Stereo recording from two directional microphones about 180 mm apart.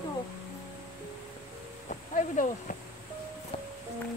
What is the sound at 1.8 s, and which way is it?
Speech, 45° left (ahead or behind).